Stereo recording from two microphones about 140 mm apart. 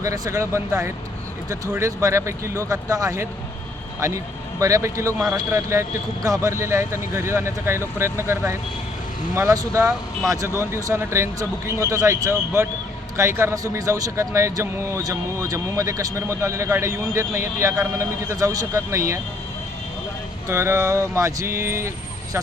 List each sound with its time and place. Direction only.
0.0 s a man's voice: 20° right (ahead or behind)
4.6 s a man's voice: 25° right (ahead or behind)
20.5 s a man's voice: 20° right (ahead or behind)